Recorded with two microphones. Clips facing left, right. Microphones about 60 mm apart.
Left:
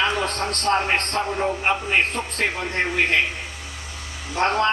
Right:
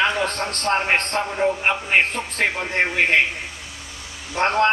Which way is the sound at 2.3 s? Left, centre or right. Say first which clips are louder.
Right 4 dB; right.